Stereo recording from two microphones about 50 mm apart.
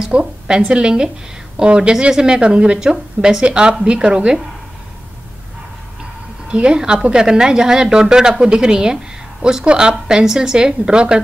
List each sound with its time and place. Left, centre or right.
0.0 s a woman's voice: centre
6.5 s a woman's voice: centre